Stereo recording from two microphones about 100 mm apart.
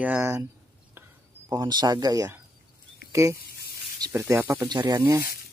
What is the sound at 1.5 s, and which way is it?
A man's voice, 40° right (ahead or behind).